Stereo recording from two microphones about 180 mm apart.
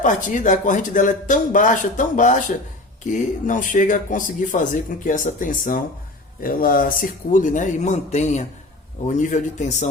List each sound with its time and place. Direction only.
0.0 s speech: 45° left (ahead or behind)